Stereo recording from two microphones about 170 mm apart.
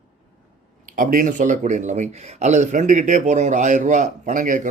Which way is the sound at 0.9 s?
55° right (ahead or behind).